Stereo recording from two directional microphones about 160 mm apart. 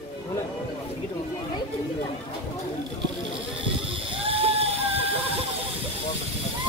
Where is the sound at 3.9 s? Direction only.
35° right (ahead or behind).